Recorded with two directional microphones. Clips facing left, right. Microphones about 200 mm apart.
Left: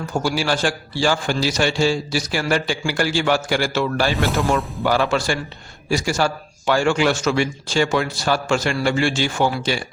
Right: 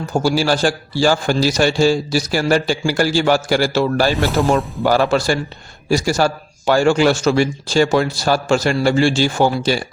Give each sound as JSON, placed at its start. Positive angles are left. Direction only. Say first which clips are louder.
{"t": 0.1, "sound": "a man's voice", "louder": "right 5 dB", "side_deg": -35}